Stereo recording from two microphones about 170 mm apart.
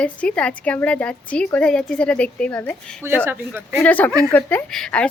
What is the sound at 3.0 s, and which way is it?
Speech, 15° right (ahead or behind).